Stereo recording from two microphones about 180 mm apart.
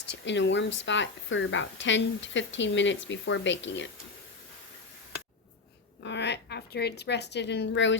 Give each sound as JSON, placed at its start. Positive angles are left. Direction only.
{"t": 0.3, "sound": "a woman's voice", "side_deg": 80}
{"t": 6.0, "sound": "speech", "side_deg": 75}